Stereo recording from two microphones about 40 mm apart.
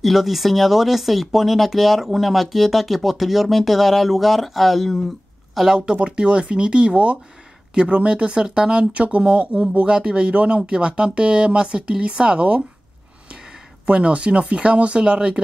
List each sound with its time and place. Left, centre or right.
0.0 s speech: centre
5.8 s speech: right
13.8 s speech: right